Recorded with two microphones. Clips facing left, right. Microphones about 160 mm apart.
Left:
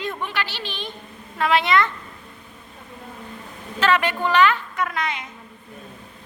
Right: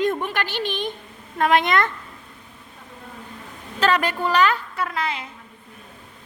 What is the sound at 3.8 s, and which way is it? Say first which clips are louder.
A woman's voice: even; 35° right (ahead or behind).